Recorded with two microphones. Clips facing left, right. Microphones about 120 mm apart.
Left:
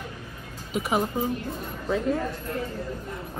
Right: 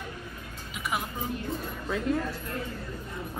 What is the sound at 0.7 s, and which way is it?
Speech, 40° left (ahead or behind).